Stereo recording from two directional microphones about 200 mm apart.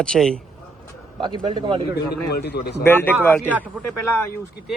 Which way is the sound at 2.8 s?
10° left (ahead or behind).